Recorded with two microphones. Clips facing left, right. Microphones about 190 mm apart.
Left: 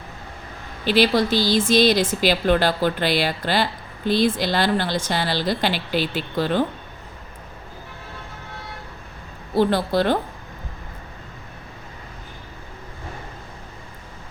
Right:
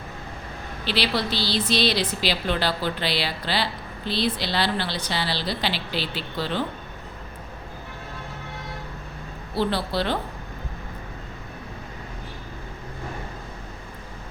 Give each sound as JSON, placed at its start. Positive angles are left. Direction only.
{"t": 0.9, "sound": "speech", "side_deg": 45}
{"t": 9.6, "sound": "speech", "side_deg": 50}